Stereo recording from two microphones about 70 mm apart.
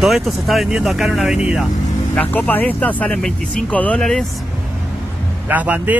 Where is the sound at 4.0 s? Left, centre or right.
Centre.